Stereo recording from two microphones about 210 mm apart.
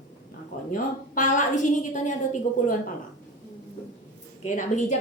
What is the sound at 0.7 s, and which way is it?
A woman's voice, 35° left (ahead or behind).